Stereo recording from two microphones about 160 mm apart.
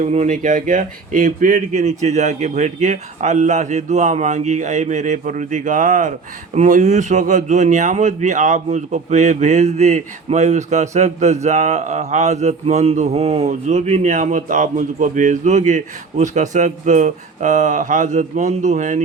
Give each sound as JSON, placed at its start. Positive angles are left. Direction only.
{"t": 0.0, "sound": "speech", "side_deg": -45}